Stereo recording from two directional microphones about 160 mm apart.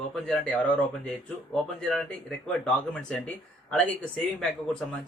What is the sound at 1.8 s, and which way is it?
Speech, 5° left (ahead or behind).